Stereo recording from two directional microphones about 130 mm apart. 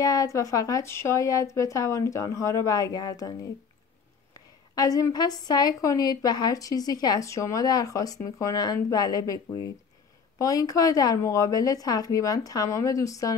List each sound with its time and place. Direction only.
0.0 s a woman's voice: 30° left (ahead or behind)
4.7 s a woman's voice: 25° left (ahead or behind)